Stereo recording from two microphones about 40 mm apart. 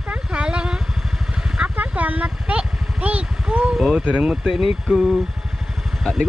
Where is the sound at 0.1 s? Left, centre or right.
Right.